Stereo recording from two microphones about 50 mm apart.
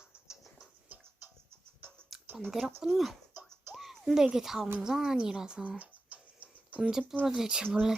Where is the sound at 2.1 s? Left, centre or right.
Centre.